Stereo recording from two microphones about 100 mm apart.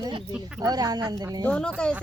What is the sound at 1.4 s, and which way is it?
Speech, 10° left (ahead or behind).